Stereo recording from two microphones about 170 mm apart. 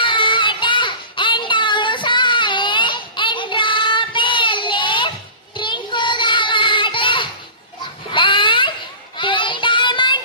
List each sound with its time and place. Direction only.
0.0 s child singing: 30° left (ahead or behind)
8.1 s baby cry: 30° left (ahead or behind)
9.1 s child singing: 30° left (ahead or behind)